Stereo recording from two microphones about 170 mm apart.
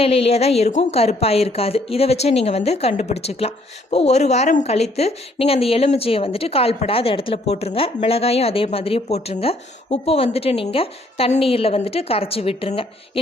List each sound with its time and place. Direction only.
0.0 s a woman's voice: 35° left (ahead or behind)